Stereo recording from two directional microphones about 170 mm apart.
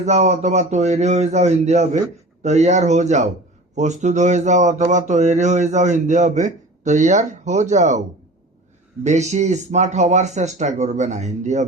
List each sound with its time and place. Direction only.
0.0 s speech: 40° right (ahead or behind)
9.0 s speech: 45° right (ahead or behind)